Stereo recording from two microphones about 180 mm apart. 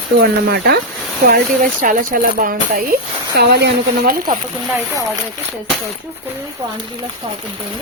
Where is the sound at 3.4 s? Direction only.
65° right (ahead or behind).